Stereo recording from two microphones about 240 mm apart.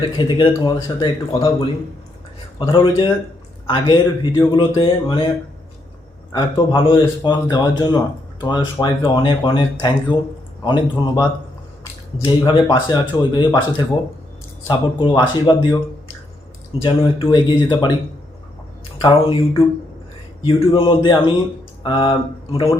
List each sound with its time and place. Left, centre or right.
0.2 s speech: centre
2.6 s speech: left
6.3 s speech: left
16.8 s speech: left
19.0 s speech: left